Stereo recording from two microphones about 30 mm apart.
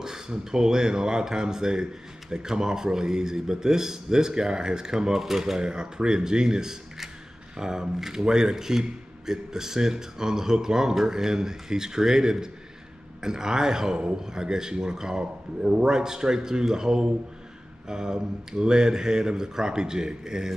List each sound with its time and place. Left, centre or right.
0.0 s speech: centre
5.6 s speech: right